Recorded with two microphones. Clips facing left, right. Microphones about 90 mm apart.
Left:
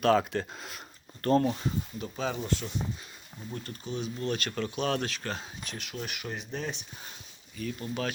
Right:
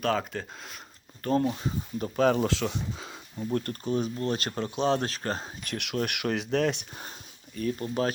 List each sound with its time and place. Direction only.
0.0 s speech: centre (ahead or behind)
2.0 s speech: 55° right (ahead or behind)
2.5 s speech: 90° right
3.5 s speech: 50° right (ahead or behind)
5.6 s speech: 75° right (ahead or behind)
7.5 s speech: 40° right (ahead or behind)